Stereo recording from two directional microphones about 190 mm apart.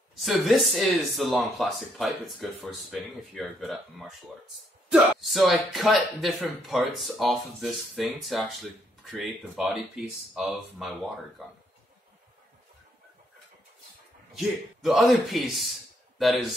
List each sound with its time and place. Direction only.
0.2 s speech: centre (ahead or behind)
5.2 s speech: centre (ahead or behind)
14.3 s speech: centre (ahead or behind)